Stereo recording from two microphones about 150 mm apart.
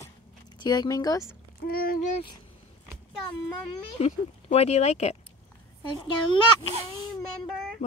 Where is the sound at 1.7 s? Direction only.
85° left.